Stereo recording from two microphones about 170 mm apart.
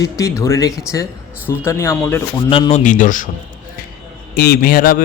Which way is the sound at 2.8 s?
50° left (ahead or behind).